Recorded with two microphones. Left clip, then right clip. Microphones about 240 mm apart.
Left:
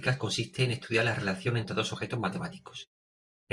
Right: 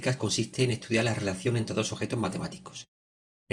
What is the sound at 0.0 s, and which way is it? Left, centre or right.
Speech, right.